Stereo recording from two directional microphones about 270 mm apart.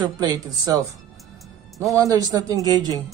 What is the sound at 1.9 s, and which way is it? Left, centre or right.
Speech, centre.